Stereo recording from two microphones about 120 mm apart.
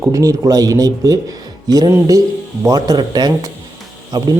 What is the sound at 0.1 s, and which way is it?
Speech, 30° right (ahead or behind).